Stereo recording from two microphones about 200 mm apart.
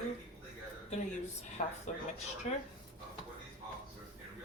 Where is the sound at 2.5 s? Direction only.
35° left (ahead or behind).